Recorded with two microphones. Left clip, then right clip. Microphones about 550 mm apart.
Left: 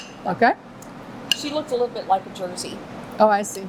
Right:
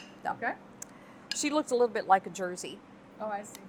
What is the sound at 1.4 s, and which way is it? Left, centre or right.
Speech, right.